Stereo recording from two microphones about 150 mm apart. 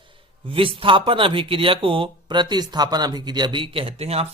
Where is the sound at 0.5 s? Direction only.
35° right (ahead or behind).